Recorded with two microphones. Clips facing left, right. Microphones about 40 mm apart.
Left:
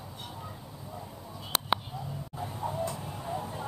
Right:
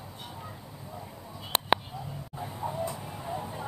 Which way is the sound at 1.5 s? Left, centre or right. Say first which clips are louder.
Right 2 dB; right.